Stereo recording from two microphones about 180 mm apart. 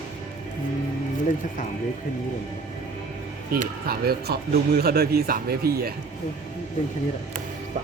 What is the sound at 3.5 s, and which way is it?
Speech, 55° right (ahead or behind).